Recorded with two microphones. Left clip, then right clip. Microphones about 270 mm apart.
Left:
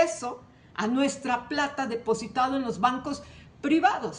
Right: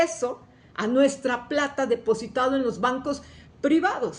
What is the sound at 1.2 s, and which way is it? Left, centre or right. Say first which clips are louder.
Speech: right 2 dB; left.